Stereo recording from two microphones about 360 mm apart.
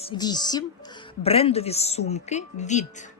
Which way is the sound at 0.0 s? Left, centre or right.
Centre.